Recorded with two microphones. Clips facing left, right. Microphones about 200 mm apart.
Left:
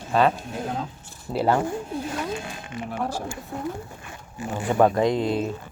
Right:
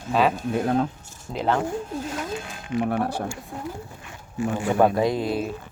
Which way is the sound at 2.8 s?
60° right (ahead or behind).